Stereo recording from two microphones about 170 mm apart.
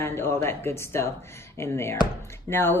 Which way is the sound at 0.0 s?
15° left (ahead or behind).